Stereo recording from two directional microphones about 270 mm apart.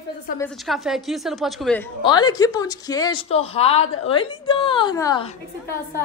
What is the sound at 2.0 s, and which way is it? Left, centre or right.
Speech, centre.